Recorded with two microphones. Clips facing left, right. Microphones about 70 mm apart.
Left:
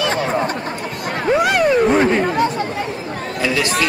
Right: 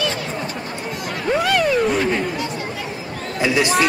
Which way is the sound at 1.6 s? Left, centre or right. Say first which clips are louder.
Left 4 dB; left.